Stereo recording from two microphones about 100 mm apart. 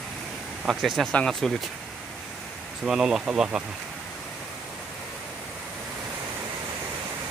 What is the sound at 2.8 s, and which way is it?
Speech, 5° right (ahead or behind).